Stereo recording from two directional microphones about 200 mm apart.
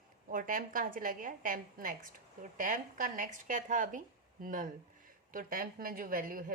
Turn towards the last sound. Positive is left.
turn(degrees=-45)  # may be behind; listen again after turning